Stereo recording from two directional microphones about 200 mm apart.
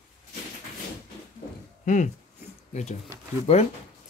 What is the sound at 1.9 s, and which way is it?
Speech, 40° left (ahead or behind).